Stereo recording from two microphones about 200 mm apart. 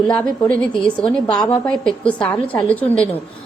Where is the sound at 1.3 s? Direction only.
20° left (ahead or behind).